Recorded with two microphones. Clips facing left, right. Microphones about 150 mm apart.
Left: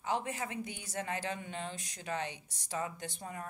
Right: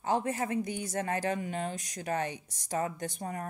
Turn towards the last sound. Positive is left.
turn(degrees=-45)  # may be behind; listen again after turning